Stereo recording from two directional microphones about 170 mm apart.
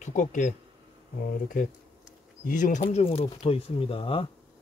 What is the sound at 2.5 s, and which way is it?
Speech, 50° left (ahead or behind).